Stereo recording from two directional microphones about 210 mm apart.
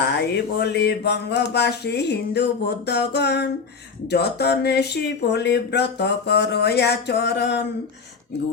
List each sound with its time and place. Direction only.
0.0 s speech: 50° left (ahead or behind)